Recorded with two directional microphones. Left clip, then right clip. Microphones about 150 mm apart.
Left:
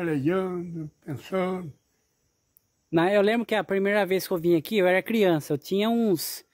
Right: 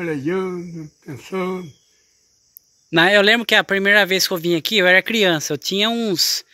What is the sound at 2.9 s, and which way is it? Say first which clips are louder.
Speech: right 8 dB; 5° left (ahead or behind).